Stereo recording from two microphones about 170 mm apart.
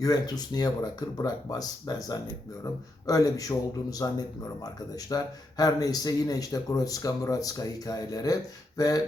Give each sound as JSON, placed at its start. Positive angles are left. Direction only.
{"t": 0.0, "sound": "speech", "side_deg": 25}